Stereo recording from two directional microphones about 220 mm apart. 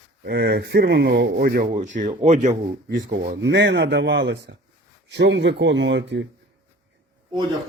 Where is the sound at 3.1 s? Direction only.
50° right (ahead or behind).